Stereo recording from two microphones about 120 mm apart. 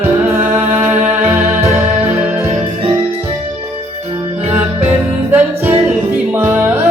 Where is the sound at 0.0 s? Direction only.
15° right (ahead or behind).